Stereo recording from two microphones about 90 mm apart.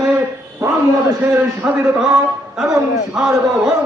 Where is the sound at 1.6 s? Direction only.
15° right (ahead or behind).